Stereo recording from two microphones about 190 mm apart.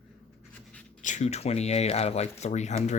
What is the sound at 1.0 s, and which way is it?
Speech, 40° left (ahead or behind).